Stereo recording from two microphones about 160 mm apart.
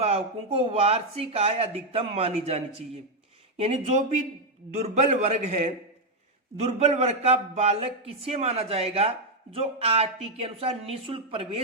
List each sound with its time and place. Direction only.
0.0 s a man's voice: 40° right (ahead or behind)